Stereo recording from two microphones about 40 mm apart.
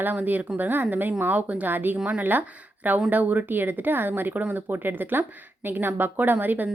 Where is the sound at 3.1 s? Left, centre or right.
Right.